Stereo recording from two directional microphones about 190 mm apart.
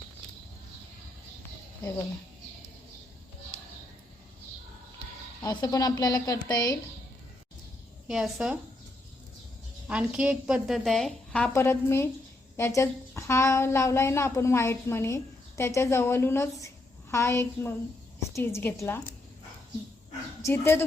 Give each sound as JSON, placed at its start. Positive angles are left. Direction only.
{"t": 5.4, "sound": "a woman's voice", "side_deg": 20}
{"t": 8.0, "sound": "a woman's voice", "side_deg": 0}
{"t": 9.8, "sound": "a woman's voice", "side_deg": -5}
{"t": 20.4, "sound": "a woman's voice", "side_deg": 10}